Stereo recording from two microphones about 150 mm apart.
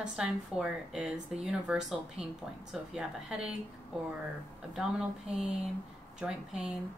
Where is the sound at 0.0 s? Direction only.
5° right (ahead or behind).